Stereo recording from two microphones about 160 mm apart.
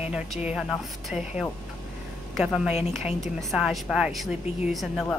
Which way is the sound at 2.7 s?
45° left (ahead or behind).